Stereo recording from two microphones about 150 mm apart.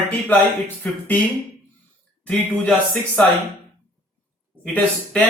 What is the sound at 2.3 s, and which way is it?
Speech, 10° left (ahead or behind).